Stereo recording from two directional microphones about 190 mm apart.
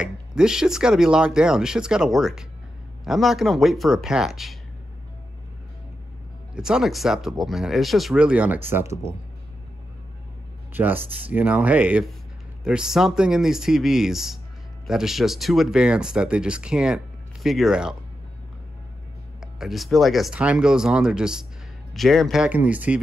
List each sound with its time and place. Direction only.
0.0 s speech: 5° right (ahead or behind)
6.5 s speech: 5° right (ahead or behind)
10.7 s speech: 10° right (ahead or behind)
19.4 s speech: centre (ahead or behind)